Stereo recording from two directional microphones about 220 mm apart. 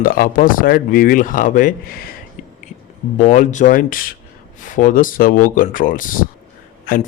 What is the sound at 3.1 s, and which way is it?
Speech, 35° left (ahead or behind).